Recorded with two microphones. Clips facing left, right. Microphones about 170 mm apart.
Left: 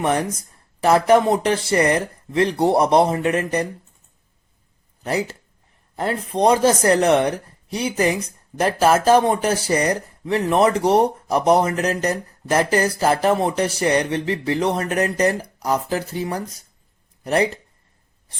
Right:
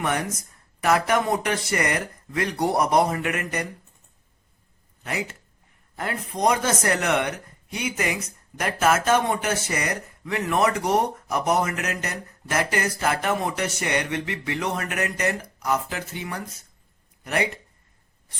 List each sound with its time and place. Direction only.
0.0 s speech: 30° left (ahead or behind)
5.0 s speech: 35° left (ahead or behind)